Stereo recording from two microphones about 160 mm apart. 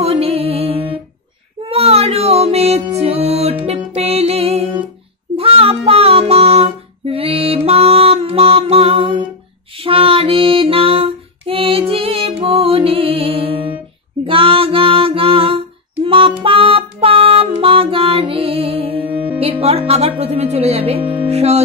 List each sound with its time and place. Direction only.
0.0 s music: 40° right (ahead or behind)
5.3 s child singing: 35° right (ahead or behind)
9.8 s music: 35° right (ahead or behind)
14.2 s female singing: 35° right (ahead or behind)
19.4 s music: 40° right (ahead or behind)